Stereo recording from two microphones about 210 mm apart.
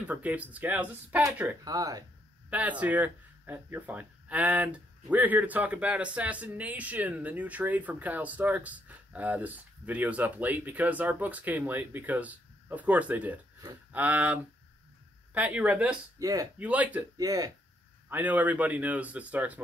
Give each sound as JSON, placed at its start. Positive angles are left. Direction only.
{"t": 0.0, "sound": "speech", "side_deg": -5}
{"t": 2.5, "sound": "speech", "side_deg": -5}
{"t": 16.2, "sound": "speech", "side_deg": -15}